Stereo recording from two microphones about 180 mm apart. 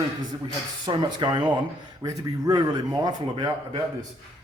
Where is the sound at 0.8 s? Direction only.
25° right (ahead or behind).